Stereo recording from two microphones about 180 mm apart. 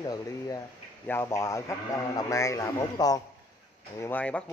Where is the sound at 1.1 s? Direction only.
15° left (ahead or behind).